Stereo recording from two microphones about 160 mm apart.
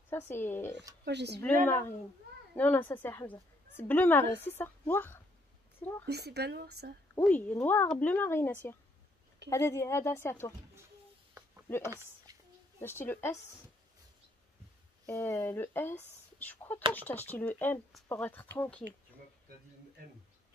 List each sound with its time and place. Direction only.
0.3 s a woman's voice: 15° left (ahead or behind)
1.0 s speech: 90° right
2.5 s a woman's voice: 10° left (ahead or behind)
6.0 s speech: 90° right
7.2 s a woman's voice: 10° left (ahead or behind)
11.9 s a sound: 20° right (ahead or behind)
12.8 s a woman's voice: 15° left (ahead or behind)
15.0 s a woman's voice: 15° left (ahead or behind)